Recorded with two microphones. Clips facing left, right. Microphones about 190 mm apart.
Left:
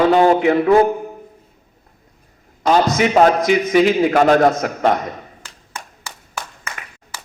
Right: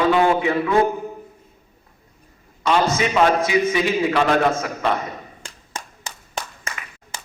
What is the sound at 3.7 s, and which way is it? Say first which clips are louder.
Speech: left 7 dB; 65° left (ahead or behind).